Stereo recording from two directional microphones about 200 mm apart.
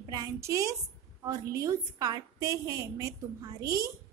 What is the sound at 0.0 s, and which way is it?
A woman's voice, 20° right (ahead or behind).